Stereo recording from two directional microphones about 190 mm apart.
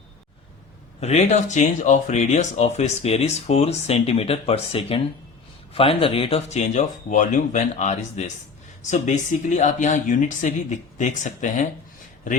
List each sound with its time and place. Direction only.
0.9 s speech: 35° left (ahead or behind)